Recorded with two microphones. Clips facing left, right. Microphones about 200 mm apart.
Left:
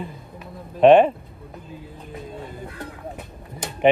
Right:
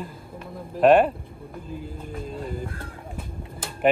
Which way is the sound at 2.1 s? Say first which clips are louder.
Right 2 dB; centre (ahead or behind).